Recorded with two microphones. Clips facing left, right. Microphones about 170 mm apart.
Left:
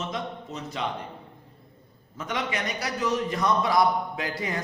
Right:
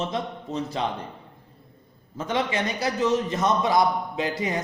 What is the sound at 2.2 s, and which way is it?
A man's voice, 30° right (ahead or behind).